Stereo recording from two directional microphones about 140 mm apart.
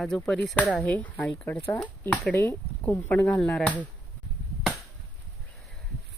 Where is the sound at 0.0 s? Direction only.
5° left (ahead or behind).